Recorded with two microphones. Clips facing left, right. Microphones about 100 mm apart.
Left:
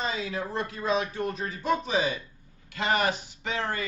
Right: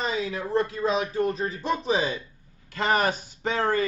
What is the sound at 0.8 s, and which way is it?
Speech, 30° right (ahead or behind).